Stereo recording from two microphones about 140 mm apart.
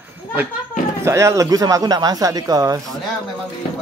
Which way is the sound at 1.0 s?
20° right (ahead or behind).